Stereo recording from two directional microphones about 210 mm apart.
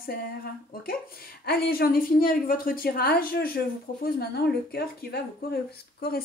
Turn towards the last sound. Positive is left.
turn(degrees=50)  # may be behind; listen again after turning